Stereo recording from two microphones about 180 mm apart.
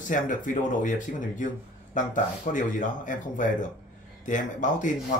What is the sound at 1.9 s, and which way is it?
Speech, 45° left (ahead or behind).